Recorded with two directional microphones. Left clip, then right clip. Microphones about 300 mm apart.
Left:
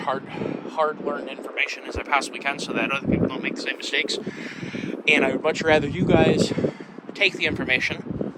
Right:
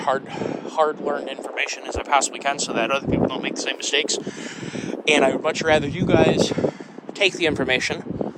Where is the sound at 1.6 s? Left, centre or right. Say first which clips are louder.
Right 1 dB; centre.